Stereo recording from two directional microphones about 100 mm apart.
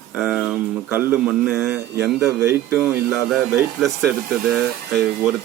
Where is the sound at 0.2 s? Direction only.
5° right (ahead or behind).